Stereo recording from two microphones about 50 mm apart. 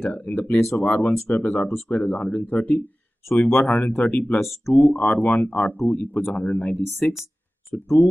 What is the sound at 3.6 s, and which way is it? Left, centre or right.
Speech, left.